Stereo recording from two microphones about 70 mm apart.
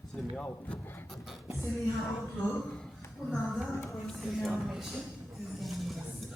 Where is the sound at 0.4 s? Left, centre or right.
Left.